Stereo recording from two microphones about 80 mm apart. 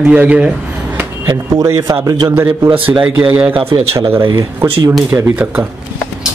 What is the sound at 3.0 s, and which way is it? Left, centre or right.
Speech, centre.